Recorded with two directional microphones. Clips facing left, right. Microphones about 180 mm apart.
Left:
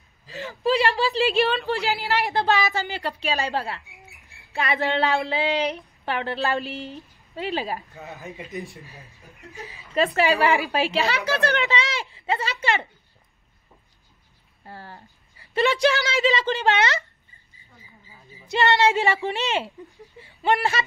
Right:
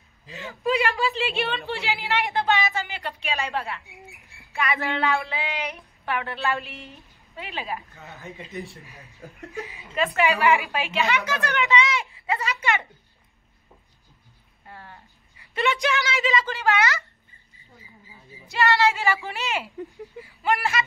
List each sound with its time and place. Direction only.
0.3 s a woman's voice: 35° left (ahead or behind)
9.9 s a woman's voice: 35° left (ahead or behind)
14.7 s a woman's voice: 35° left (ahead or behind)
18.5 s a woman's voice: 20° left (ahead or behind)